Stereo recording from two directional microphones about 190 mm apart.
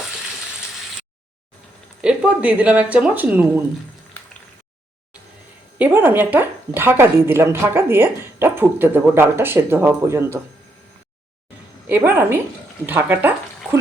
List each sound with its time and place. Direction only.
2.0 s speech: 5° right (ahead or behind)
5.8 s speech: 10° right (ahead or behind)
11.9 s speech: 10° right (ahead or behind)